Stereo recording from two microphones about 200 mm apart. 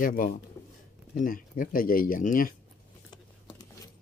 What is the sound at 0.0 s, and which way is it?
Speech, 45° left (ahead or behind).